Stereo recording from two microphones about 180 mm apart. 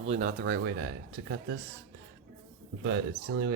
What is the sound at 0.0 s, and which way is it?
Speech, 40° right (ahead or behind).